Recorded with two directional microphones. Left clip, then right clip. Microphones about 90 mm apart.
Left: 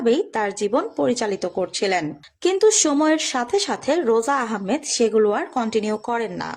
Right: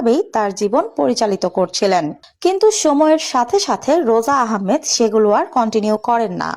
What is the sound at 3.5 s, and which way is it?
Speech, 35° right (ahead or behind).